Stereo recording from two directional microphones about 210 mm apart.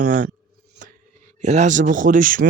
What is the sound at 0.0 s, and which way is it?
Speech, 40° right (ahead or behind).